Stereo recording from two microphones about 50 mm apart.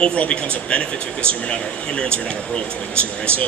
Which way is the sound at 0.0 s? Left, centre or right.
Left.